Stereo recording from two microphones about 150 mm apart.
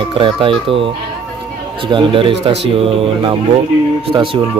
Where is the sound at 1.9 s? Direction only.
35° right (ahead or behind).